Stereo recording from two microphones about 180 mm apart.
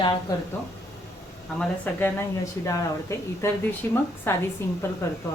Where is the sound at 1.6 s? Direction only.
10° left (ahead or behind).